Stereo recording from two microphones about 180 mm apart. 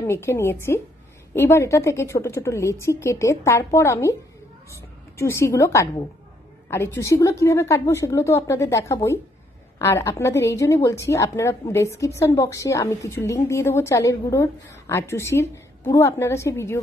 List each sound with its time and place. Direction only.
0.0 s a woman's voice: 15° left (ahead or behind)